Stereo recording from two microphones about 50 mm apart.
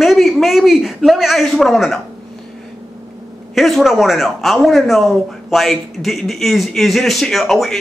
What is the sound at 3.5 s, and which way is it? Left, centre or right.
Speech, centre.